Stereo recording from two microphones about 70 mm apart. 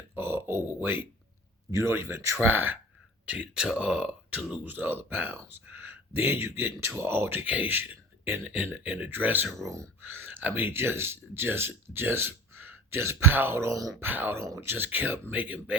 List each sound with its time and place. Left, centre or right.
0.2 s speech: right
1.7 s speech: right
3.3 s speech: centre
4.6 s speech: right
9.6 s speech: right
10.0 s speech: right
14.0 s speech: right
14.3 s speech: right
14.7 s speech: right